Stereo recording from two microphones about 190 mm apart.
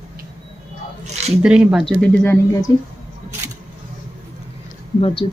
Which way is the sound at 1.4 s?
5° right (ahead or behind).